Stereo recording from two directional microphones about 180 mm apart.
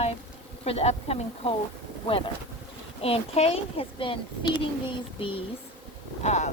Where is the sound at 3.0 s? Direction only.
35° left (ahead or behind).